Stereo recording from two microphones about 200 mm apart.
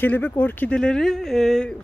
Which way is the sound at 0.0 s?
10° left (ahead or behind).